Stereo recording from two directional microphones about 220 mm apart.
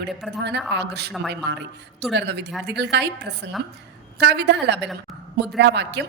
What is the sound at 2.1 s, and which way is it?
A woman's voice, 50° right (ahead or behind).